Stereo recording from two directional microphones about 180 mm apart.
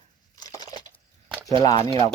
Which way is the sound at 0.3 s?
20° left (ahead or behind).